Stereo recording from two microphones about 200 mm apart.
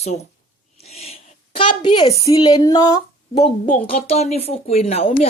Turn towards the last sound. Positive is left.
turn(degrees=30)  # may be behind; listen again after turning